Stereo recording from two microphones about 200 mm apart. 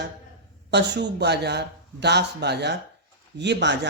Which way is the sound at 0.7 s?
60° right (ahead or behind).